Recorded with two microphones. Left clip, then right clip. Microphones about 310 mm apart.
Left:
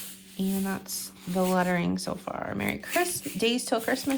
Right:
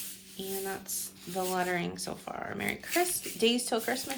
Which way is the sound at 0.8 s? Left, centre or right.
Centre.